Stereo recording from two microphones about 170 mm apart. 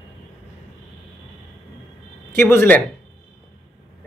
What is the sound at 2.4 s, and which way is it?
Speech, 10° left (ahead or behind).